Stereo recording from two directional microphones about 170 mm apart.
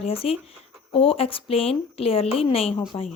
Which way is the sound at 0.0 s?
35° left (ahead or behind).